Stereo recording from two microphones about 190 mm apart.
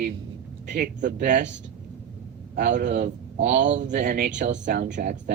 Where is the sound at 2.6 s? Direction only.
40° right (ahead or behind).